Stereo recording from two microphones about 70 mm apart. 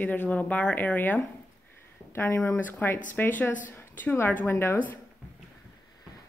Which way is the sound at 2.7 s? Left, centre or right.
Left.